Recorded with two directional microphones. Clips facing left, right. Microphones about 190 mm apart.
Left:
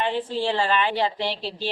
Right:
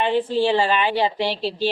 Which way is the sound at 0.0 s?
15° right (ahead or behind).